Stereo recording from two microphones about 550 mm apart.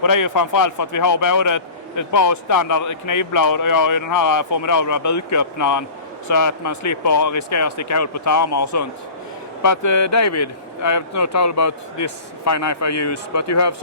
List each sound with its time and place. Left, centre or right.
0.0 s a man's voice: left